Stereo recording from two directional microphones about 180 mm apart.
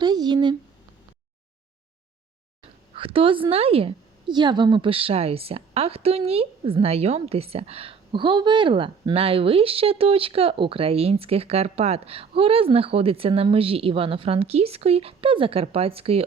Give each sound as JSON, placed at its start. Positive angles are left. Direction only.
{"t": 0.0, "sound": "speech", "side_deg": -25}
{"t": 3.0, "sound": "a woman's voice", "side_deg": -30}